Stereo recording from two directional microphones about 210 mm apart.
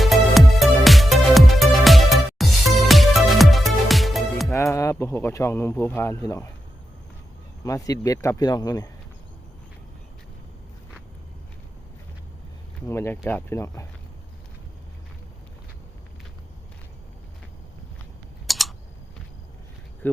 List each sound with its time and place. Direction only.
0.0 s music: centre (ahead or behind)
4.5 s speech: 15° left (ahead or behind)
7.6 s speech: 15° left (ahead or behind)
12.9 s speech: 10° left (ahead or behind)
18.4 s typing: centre (ahead or behind)